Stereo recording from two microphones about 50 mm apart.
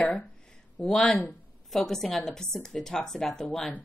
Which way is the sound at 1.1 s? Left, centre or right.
Centre.